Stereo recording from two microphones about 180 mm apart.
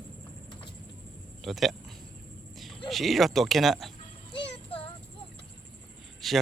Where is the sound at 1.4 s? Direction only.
Centre (ahead or behind).